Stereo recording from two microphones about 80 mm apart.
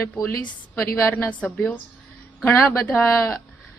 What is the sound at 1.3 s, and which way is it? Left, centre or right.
Speech, centre.